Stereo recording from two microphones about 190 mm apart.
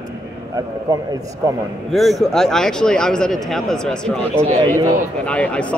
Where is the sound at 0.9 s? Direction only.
15° right (ahead or behind).